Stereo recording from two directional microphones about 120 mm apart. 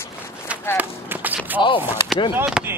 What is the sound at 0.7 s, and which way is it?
Run, 15° right (ahead or behind).